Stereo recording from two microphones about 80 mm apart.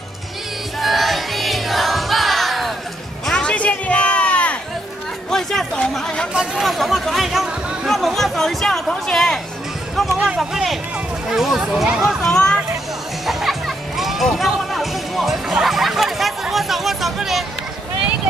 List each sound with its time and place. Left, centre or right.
0.7 s music: centre
3.3 s a sound: centre
5.3 s chatter: centre
6.3 s speech: centre
10.1 s speech: centre
13.3 s music: centre